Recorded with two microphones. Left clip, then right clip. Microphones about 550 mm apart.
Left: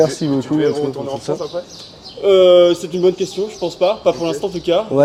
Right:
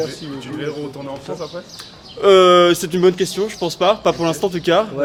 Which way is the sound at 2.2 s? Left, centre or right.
Right.